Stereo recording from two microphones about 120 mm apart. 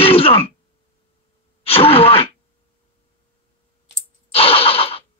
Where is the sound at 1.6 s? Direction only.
50° left (ahead or behind).